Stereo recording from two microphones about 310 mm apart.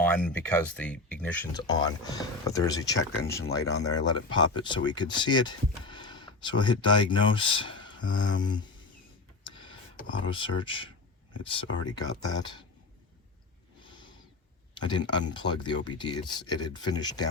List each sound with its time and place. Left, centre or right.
0.0 s speech: centre
10.2 s speech: centre
14.8 s speech: centre